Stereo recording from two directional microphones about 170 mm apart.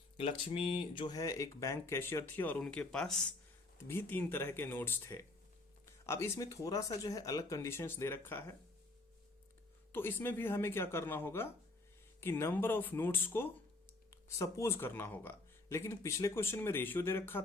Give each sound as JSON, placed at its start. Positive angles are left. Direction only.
{"t": 0.2, "sound": "speech", "side_deg": 30}
{"t": 9.9, "sound": "speech", "side_deg": 10}